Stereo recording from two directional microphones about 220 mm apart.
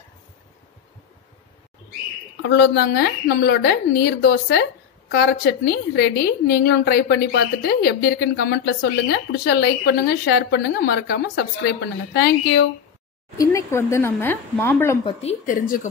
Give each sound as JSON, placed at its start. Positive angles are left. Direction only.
{"t": 2.4, "sound": "a woman's voice", "side_deg": 50}
{"t": 13.4, "sound": "speech", "side_deg": 15}
{"t": 15.0, "sound": "a woman's voice", "side_deg": 35}